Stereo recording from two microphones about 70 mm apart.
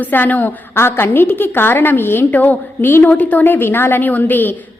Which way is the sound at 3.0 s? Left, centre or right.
Left.